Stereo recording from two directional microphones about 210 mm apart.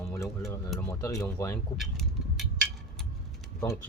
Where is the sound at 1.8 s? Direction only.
Centre (ahead or behind).